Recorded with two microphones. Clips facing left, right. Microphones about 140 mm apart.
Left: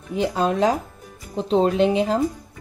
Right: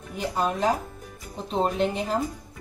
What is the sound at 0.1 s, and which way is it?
Speech, 90° left.